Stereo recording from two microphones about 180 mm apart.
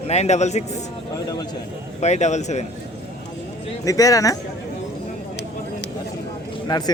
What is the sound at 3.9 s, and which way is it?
Speech, 20° left (ahead or behind).